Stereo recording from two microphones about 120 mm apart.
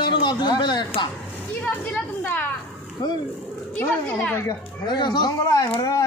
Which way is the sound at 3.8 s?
15° left (ahead or behind).